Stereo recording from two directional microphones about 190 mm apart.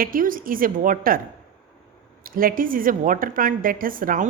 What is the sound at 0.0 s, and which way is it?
A woman's voice, 45° right (ahead or behind).